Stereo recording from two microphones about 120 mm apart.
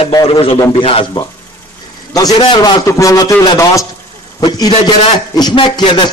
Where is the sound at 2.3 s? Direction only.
40° left (ahead or behind).